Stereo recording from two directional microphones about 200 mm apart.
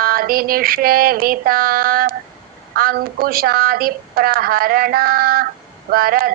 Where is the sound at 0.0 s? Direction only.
45° right (ahead or behind).